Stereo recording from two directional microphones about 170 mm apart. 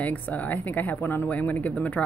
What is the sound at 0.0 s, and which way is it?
Speech, 10° left (ahead or behind).